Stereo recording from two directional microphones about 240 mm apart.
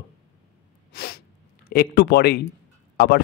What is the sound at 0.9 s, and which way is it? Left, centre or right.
Sneeze, left.